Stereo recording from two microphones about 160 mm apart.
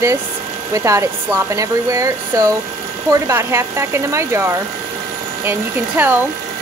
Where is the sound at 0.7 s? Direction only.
20° right (ahead or behind).